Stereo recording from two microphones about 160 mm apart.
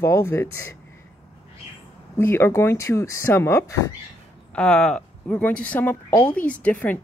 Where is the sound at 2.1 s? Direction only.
15° left (ahead or behind).